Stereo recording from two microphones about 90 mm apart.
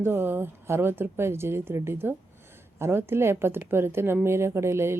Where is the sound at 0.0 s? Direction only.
25° right (ahead or behind).